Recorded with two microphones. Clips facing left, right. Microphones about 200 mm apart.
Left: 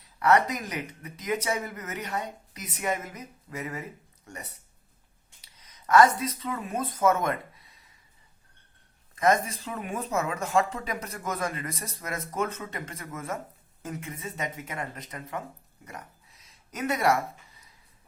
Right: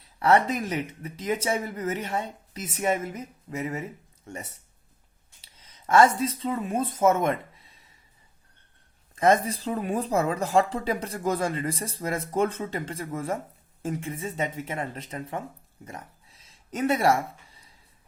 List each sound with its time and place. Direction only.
0.2 s speech: 30° right (ahead or behind)
9.1 s speech: 30° right (ahead or behind)